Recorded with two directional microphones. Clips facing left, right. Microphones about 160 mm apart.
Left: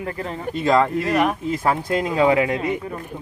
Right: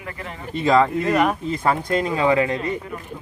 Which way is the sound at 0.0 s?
35° left (ahead or behind).